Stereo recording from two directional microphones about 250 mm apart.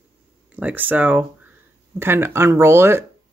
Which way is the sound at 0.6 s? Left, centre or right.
Centre.